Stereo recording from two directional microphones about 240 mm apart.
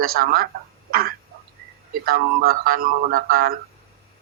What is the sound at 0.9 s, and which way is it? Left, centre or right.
Throat clearing, right.